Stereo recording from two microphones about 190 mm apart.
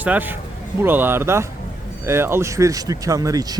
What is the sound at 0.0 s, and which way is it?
Speech, 10° right (ahead or behind).